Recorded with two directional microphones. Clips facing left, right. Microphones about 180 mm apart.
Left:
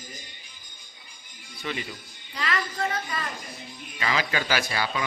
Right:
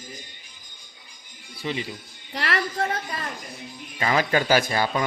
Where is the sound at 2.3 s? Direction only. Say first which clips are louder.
Right 3 dB; 70° right (ahead or behind).